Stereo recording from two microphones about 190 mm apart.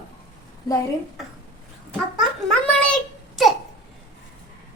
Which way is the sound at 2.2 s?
5° left (ahead or behind).